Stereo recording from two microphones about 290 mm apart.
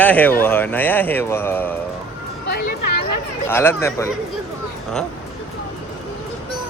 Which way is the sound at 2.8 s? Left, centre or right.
Left.